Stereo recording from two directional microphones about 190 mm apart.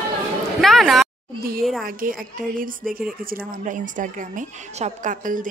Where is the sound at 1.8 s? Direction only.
50° right (ahead or behind).